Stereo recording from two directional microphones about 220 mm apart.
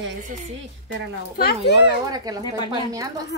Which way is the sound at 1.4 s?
45° left (ahead or behind).